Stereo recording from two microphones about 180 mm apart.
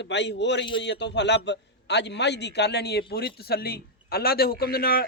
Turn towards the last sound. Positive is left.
turn(degrees=55)  # may be behind; listen again after turning